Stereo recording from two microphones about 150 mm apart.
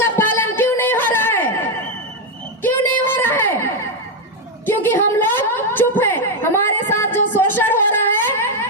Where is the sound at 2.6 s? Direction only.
15° left (ahead or behind).